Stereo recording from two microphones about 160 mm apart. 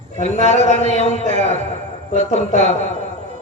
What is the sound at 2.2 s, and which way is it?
Speech, 45° left (ahead or behind).